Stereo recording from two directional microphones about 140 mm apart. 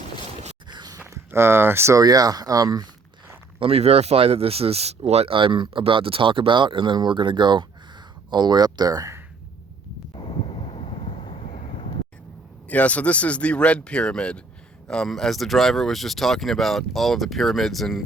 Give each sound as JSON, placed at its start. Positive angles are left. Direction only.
{"t": 0.7, "sound": "biting", "side_deg": -30}
{"t": 1.0, "sound": "speech", "side_deg": -20}
{"t": 3.6, "sound": "speech", "side_deg": -45}
{"t": 10.2, "sound": "vehicle", "side_deg": 40}
{"t": 12.6, "sound": "speech", "side_deg": 10}